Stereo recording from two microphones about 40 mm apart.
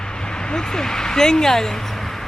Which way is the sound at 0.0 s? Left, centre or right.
Centre.